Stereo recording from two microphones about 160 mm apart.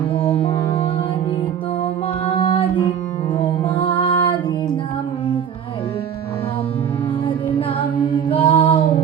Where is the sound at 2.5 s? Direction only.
35° left (ahead or behind).